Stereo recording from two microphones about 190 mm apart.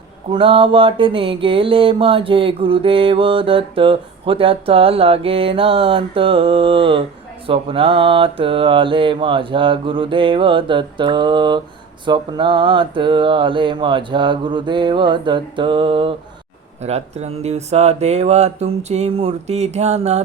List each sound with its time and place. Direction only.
0.3 s mantra: 30° right (ahead or behind)
16.8 s speech: 35° right (ahead or behind)